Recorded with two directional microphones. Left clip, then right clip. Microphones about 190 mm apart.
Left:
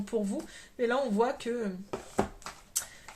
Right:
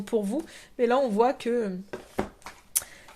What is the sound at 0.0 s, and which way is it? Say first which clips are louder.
Speech: right 5 dB; 40° right (ahead or behind).